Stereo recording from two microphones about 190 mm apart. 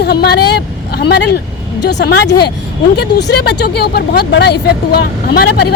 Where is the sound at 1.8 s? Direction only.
65° left (ahead or behind).